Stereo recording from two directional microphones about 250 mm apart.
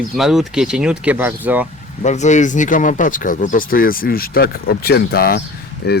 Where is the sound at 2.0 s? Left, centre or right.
Left.